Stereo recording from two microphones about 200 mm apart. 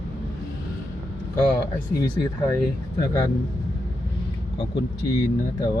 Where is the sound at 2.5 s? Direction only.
15° left (ahead or behind).